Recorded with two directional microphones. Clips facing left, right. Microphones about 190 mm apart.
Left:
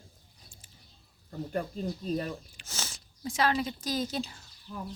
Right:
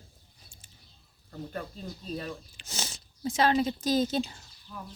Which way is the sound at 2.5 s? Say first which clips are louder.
Right 2 dB; 15° right (ahead or behind).